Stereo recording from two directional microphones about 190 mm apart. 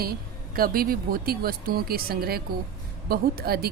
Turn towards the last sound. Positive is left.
turn(degrees=-55)  # may be behind; listen again after turning